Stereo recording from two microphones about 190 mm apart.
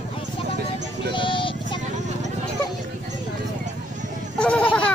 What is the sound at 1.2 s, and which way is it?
Music, 25° left (ahead or behind).